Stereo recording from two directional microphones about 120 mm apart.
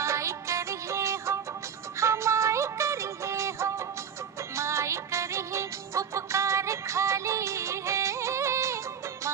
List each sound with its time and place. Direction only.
0.0 s music: 25° right (ahead or behind)